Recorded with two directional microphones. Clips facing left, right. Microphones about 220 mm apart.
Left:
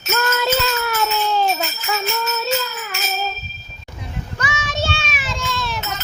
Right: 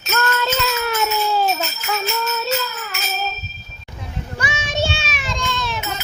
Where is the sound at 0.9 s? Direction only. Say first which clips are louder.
Even; 15° right (ahead or behind).